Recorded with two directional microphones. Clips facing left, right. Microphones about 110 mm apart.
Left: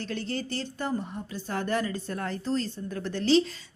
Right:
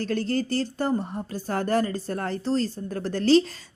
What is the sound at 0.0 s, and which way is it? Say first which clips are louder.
Speech: right 7 dB; 40° right (ahead or behind).